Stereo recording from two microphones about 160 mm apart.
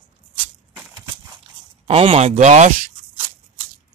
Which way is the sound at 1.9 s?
35° right (ahead or behind).